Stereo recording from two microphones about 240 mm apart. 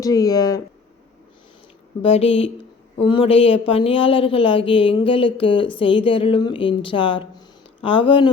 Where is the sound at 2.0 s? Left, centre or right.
Left.